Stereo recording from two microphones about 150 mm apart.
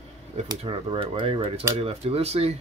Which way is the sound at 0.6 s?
35° right (ahead or behind).